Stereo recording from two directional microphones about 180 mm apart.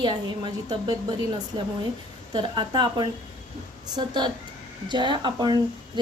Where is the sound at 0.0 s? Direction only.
25° right (ahead or behind).